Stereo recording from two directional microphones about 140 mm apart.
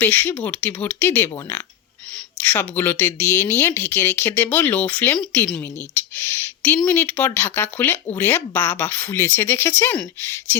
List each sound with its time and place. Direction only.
0.0 s speech: 15° left (ahead or behind)